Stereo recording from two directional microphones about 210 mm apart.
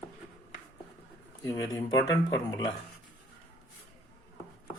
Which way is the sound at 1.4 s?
15° left (ahead or behind).